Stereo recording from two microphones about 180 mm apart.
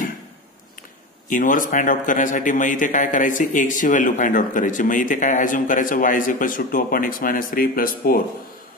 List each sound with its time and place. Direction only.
1.3 s a man's voice: 50° left (ahead or behind)